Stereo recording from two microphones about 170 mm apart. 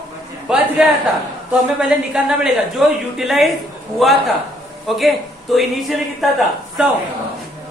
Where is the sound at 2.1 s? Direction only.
5° right (ahead or behind).